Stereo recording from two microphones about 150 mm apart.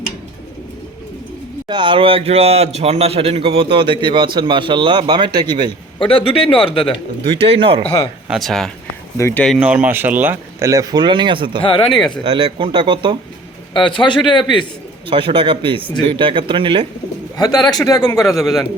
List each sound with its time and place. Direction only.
1.6 s speech: 35° right (ahead or behind)
6.0 s a man's voice: 35° left (ahead or behind)
7.3 s speech: 40° right (ahead or behind)
8.3 s speech: centre (ahead or behind)
9.1 s speech: 20° left (ahead or behind)
9.6 s speech: 10° right (ahead or behind); by 11.6 s 35° right (ahead or behind)
11.6 s a man's voice: 35° left (ahead or behind)
12.2 s speech: 35° right (ahead or behind)
13.9 s a man's voice: 30° left (ahead or behind)
15.0 s speech: 35° right (ahead or behind)
17.3 s a man's voice: 25° left (ahead or behind)